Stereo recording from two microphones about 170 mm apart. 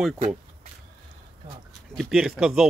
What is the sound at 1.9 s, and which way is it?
Speech, centre (ahead or behind).